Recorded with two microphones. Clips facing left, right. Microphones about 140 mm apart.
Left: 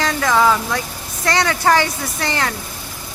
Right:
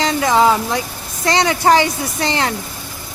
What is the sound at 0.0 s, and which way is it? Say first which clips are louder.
Speech: right 2 dB; 20° right (ahead or behind).